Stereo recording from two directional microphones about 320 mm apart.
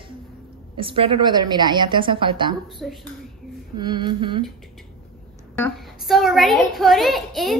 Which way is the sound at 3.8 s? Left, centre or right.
Centre.